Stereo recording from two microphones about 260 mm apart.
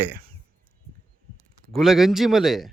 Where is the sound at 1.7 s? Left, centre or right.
Centre.